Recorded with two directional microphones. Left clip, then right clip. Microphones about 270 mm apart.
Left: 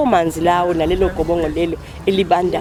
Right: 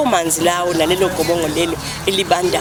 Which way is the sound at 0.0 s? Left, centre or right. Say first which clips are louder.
Left 1 dB; centre.